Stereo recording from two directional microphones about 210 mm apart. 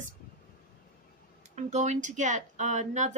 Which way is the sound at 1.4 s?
35° right (ahead or behind).